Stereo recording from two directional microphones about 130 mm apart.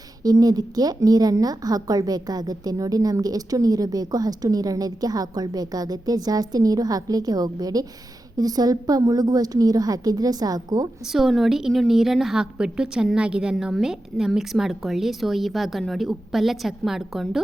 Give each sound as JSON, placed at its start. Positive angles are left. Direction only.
{"t": 0.2, "sound": "a woman's voice", "side_deg": -30}
{"t": 11.0, "sound": "a woman's voice", "side_deg": 0}